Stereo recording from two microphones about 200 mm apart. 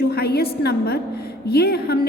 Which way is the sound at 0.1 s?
50° left (ahead or behind).